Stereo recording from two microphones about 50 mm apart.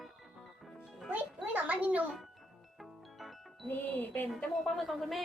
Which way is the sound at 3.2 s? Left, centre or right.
Centre.